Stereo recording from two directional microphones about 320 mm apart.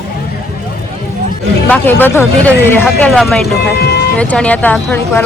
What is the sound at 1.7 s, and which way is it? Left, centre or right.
Speech, centre.